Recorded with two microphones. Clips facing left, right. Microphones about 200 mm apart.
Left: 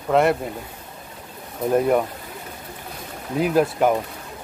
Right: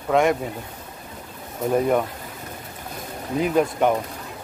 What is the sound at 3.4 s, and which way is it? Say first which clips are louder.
Speech: left 1 dB; 5° left (ahead or behind).